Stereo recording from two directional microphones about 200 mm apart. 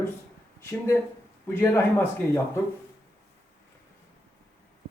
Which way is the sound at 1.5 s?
10° left (ahead or behind).